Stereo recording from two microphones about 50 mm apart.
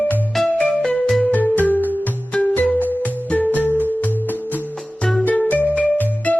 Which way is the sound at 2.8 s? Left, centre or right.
Left.